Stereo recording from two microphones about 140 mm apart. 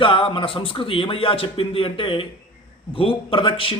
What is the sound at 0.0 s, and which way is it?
Speech, 35° left (ahead or behind).